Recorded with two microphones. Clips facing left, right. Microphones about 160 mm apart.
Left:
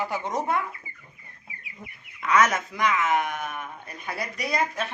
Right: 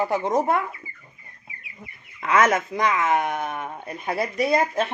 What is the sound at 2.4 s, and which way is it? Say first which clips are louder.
Speech: right 3 dB; 25° right (ahead or behind).